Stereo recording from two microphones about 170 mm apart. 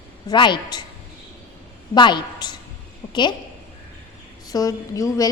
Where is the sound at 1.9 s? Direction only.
25° left (ahead or behind).